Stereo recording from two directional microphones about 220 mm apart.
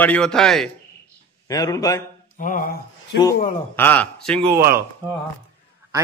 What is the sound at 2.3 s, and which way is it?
Speech, 35° left (ahead or behind).